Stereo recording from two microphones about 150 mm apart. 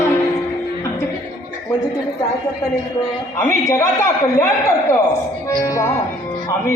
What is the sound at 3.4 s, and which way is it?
Music, 20° left (ahead or behind).